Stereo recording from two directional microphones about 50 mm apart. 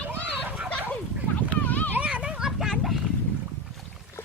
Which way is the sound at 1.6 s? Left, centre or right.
Left.